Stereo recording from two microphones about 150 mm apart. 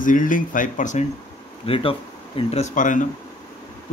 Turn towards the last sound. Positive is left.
turn(degrees=60)  # may be behind; listen again after turning